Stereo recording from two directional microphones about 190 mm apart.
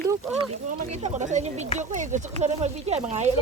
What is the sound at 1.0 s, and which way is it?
Speech, 40° right (ahead or behind).